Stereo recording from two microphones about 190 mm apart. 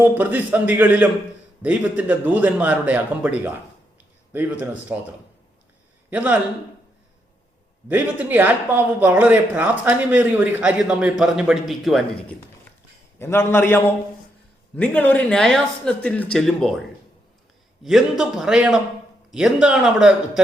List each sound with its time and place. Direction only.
0.0 s a man's voice: 10° right (ahead or behind)
6.1 s a man's voice: 10° right (ahead or behind)
7.9 s a man's voice: 10° right (ahead or behind)
13.1 s a man's voice: 10° left (ahead or behind)
17.8 s speech: centre (ahead or behind)